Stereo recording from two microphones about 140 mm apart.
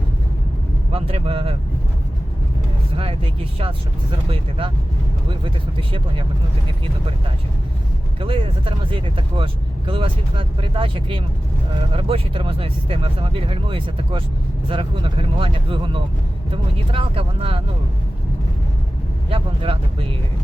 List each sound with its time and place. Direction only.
0.9 s speech: 40° right (ahead or behind)
2.9 s speech: 40° right (ahead or behind)
8.2 s speech: 40° right (ahead or behind)
19.3 s speech: 40° right (ahead or behind)